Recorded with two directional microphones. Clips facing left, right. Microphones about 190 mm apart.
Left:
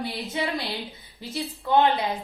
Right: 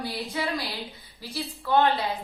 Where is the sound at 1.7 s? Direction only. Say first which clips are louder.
Left 2 dB; 20° left (ahead or behind).